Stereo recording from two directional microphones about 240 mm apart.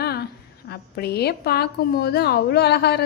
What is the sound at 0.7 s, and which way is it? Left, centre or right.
A woman's voice, left.